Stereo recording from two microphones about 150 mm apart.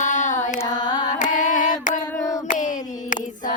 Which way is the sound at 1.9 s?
25° left (ahead or behind).